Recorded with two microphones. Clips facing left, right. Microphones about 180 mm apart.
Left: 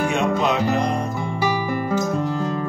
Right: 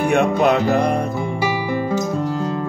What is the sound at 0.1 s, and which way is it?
Music, 60° right (ahead or behind).